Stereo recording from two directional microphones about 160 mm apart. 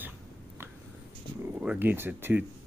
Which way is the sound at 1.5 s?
10° right (ahead or behind).